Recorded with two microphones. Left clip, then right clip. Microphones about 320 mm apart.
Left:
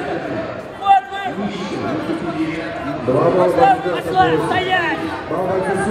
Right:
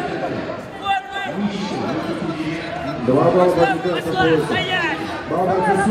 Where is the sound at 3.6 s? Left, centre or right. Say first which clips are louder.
Left 4 dB; left.